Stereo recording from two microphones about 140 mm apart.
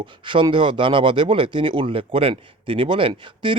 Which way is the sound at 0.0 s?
35° right (ahead or behind).